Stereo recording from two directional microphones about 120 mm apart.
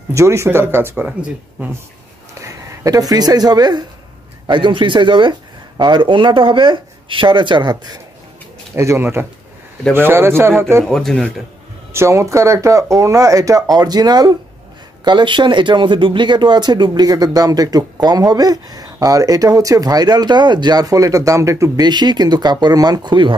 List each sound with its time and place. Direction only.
0.1 s speech: 25° right (ahead or behind)
1.0 s speech: 5° right (ahead or behind)
2.4 s speech: 30° right (ahead or behind)
8.7 s speech: 20° right (ahead or behind)
10.8 s speech: 5° left (ahead or behind)
11.9 s speech: 25° right (ahead or behind); by 23.3 s 40° right (ahead or behind)